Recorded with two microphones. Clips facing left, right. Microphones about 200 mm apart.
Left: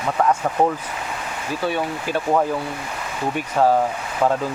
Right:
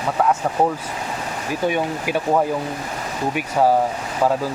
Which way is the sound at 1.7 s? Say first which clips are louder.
Right 1 dB; 10° right (ahead or behind).